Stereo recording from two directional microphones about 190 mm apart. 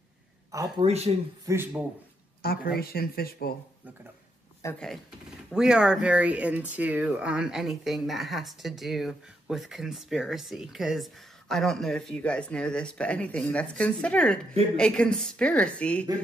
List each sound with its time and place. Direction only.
0.7 s speech: 35° right (ahead or behind)
1.4 s a man's voice: 15° right (ahead or behind)
2.4 s speech: 50° left (ahead or behind)
4.7 s speech: centre (ahead or behind)